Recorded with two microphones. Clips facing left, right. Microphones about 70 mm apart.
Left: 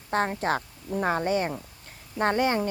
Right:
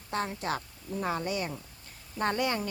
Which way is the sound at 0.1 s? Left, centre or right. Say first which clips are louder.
Left 6 dB; left.